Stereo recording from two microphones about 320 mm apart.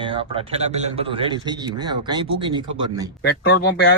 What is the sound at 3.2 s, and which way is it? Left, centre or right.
Speech, left.